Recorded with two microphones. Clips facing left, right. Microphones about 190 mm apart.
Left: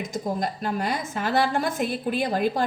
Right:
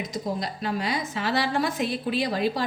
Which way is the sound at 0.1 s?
50° left (ahead or behind).